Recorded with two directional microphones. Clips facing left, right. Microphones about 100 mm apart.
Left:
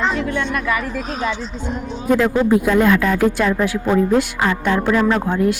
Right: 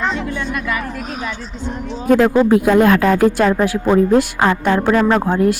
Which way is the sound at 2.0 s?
65° right (ahead or behind).